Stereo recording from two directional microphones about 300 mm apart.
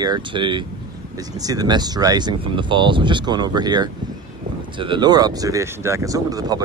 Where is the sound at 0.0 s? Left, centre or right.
Centre.